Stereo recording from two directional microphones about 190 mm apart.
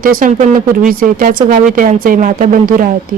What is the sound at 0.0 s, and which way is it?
Speech, 50° right (ahead or behind).